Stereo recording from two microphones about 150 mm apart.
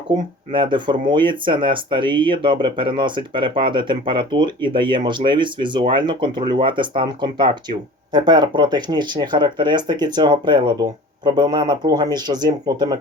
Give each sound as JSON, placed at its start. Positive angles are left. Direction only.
{"t": 0.1, "sound": "speech", "side_deg": -30}